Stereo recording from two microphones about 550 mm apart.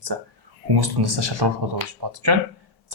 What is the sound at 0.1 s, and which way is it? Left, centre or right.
Speech, right.